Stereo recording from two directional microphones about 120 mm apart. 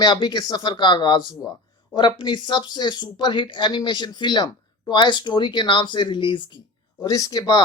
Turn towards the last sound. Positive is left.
turn(degrees=30)  # may be behind; listen again after turning